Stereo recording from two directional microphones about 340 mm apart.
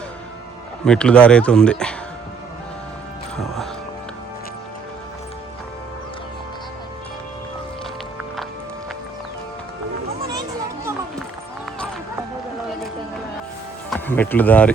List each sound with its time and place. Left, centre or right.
0.9 s speech: centre
3.3 s music: centre
13.9 s speech: centre